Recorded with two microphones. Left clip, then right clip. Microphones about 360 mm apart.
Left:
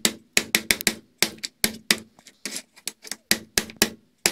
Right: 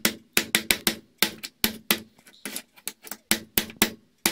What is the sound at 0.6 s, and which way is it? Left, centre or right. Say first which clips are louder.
Drum: left 1 dB; centre.